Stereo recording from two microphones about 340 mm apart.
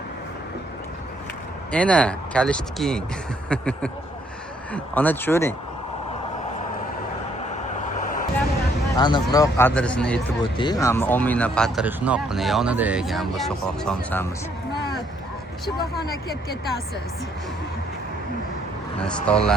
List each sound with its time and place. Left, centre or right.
1.7 s speech: centre
8.9 s speech: centre
15.6 s speech: centre
19.0 s speech: centre